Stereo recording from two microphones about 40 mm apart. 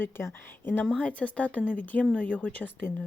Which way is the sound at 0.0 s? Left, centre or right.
Left.